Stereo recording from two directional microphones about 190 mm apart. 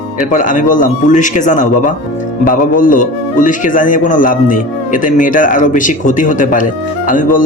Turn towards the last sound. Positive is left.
turn(degrees=45)  # may be behind; listen again after turning